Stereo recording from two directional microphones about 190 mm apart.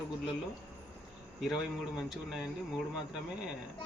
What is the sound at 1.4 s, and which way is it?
A man's voice, centre (ahead or behind).